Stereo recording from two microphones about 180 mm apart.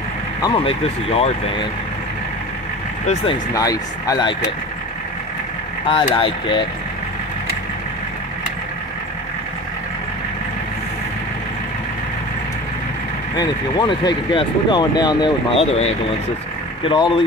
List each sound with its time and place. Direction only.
0.4 s speech: 30° left (ahead or behind)
3.5 s speech: 20° left (ahead or behind)
5.9 s speech: 30° left (ahead or behind)
13.4 s speech: 25° left (ahead or behind)